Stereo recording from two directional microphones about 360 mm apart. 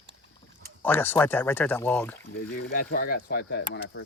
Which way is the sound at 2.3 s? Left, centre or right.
Left.